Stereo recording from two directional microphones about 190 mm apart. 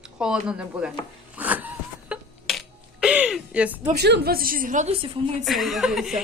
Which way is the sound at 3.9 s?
60° right (ahead or behind).